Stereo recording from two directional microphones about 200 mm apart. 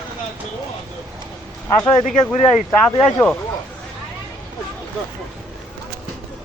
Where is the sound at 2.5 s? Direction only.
30° left (ahead or behind).